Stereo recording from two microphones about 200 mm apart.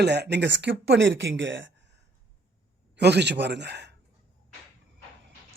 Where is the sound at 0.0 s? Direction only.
55° right (ahead or behind).